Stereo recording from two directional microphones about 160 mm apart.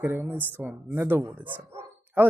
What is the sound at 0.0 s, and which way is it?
Speech, 15° right (ahead or behind).